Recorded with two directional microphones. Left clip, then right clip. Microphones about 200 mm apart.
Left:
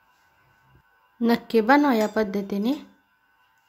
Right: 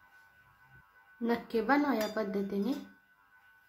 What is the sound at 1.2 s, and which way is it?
Speech, 35° left (ahead or behind).